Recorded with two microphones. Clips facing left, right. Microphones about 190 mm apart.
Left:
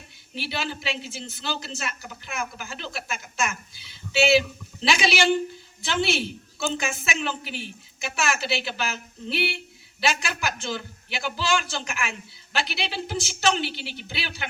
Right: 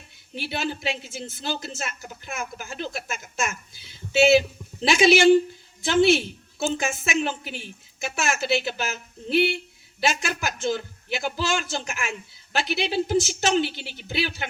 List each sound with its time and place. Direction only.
0.3 s a woman's voice: 45° right (ahead or behind)